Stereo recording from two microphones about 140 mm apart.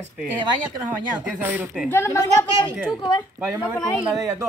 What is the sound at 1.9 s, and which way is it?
Speech, 20° left (ahead or behind).